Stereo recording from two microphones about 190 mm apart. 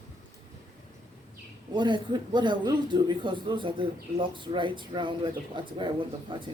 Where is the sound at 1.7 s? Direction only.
25° right (ahead or behind).